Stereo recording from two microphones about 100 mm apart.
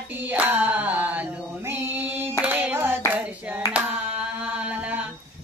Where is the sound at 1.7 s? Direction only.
20° right (ahead or behind).